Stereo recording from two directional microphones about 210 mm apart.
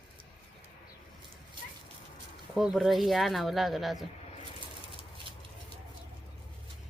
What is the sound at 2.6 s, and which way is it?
Speech, centre (ahead or behind).